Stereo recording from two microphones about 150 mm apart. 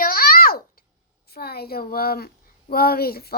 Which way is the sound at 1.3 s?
90° left.